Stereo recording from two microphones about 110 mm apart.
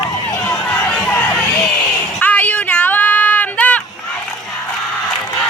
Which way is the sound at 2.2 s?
15° left (ahead or behind).